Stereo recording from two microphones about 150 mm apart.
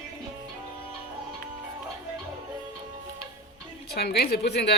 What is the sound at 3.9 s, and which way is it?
Speech, 90° left.